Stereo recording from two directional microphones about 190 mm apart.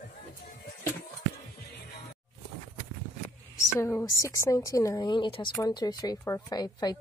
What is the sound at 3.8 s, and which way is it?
Speech, 15° left (ahead or behind).